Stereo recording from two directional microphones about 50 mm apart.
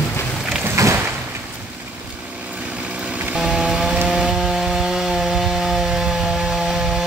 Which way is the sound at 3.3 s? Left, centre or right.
Centre.